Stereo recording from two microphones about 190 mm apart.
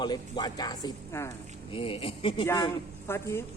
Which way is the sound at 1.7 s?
30° left (ahead or behind).